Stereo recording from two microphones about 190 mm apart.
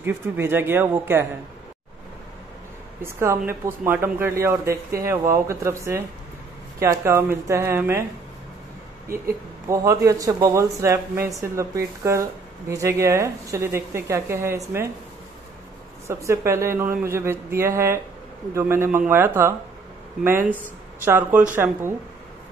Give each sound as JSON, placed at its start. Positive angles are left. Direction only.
{"t": 0.0, "sound": "speech", "side_deg": -10}
{"t": 3.0, "sound": "speech", "side_deg": -15}
{"t": 9.1, "sound": "speech", "side_deg": -15}
{"t": 16.1, "sound": "speech", "side_deg": -15}